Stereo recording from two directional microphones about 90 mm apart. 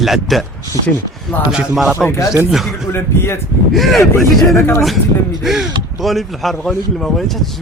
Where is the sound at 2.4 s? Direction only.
5° right (ahead or behind).